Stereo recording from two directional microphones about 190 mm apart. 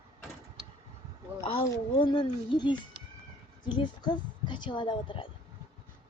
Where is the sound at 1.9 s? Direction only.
25° left (ahead or behind).